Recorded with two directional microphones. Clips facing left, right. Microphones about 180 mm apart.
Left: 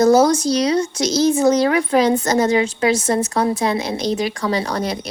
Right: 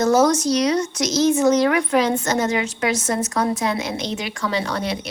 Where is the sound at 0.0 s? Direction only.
35° left (ahead or behind).